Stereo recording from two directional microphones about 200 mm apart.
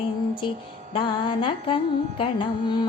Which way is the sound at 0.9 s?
25° left (ahead or behind).